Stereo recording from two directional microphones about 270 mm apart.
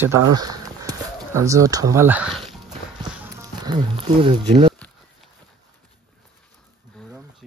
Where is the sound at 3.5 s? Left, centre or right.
Centre.